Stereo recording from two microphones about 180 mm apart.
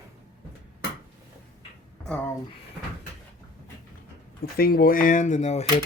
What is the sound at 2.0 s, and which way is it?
Speech, 10° left (ahead or behind).